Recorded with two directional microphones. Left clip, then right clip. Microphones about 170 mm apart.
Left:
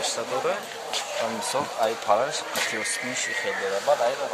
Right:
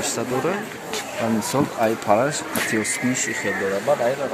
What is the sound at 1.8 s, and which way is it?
Speech, 45° right (ahead or behind).